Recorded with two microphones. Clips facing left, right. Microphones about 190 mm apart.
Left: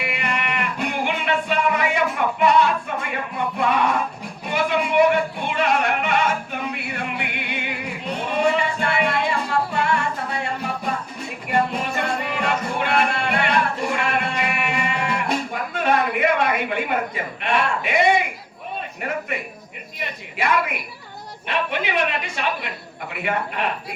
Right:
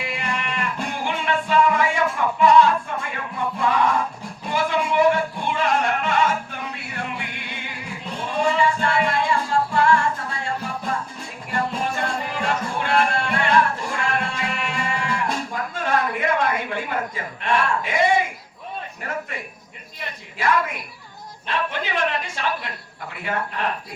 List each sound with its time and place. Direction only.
0.0 s music: 65° left (ahead or behind)
20.4 s a sound: 70° left (ahead or behind)
23.1 s speech: 70° left (ahead or behind)